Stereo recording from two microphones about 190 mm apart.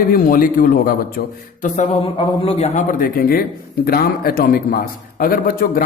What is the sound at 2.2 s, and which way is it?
Speech, 30° left (ahead or behind).